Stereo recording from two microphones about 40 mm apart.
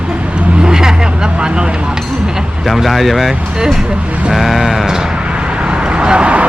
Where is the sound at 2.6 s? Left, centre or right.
Centre.